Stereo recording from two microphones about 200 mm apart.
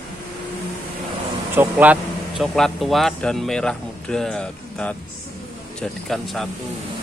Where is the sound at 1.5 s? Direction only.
10° right (ahead or behind).